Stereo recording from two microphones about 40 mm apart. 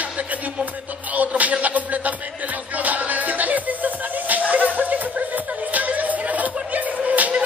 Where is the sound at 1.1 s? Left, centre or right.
Right.